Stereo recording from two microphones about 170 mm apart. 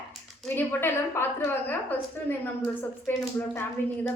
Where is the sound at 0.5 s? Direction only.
10° left (ahead or behind).